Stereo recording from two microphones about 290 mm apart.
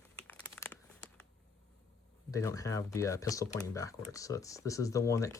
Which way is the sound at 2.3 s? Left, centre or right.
Centre.